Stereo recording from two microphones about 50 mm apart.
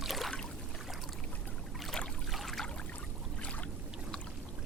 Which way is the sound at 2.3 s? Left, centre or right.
Centre.